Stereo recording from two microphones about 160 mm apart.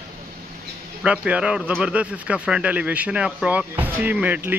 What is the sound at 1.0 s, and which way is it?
Speech, 5° right (ahead or behind).